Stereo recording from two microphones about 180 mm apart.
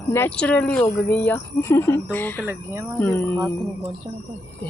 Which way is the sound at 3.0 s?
10° left (ahead or behind).